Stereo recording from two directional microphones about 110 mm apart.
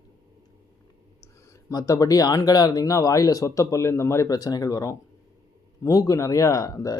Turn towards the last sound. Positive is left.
turn(degrees=30)  # may be behind; listen again after turning